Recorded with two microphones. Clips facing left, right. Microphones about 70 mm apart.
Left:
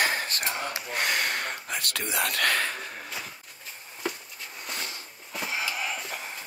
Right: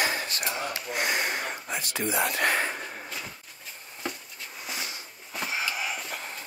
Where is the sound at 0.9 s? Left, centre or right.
Left.